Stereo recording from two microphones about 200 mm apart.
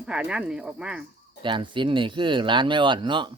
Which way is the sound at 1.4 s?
25° right (ahead or behind).